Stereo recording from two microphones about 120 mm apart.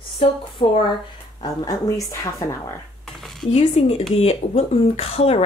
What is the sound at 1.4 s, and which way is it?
A woman's voice, 30° left (ahead or behind).